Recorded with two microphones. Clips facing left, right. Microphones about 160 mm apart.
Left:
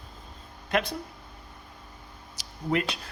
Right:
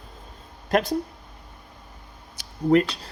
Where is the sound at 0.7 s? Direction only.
40° right (ahead or behind).